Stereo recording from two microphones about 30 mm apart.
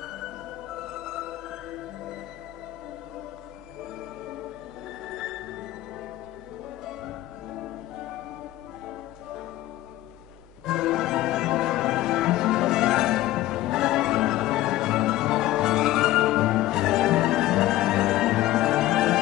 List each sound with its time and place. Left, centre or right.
0.0 s music: centre
5.0 s music: centre
6.9 s music: centre
10.6 s music: centre